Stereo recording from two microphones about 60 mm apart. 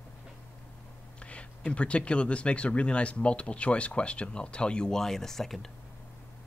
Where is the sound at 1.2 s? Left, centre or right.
Centre.